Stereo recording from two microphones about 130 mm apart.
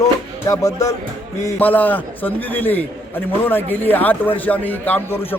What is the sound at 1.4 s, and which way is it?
A man's voice, 15° left (ahead or behind).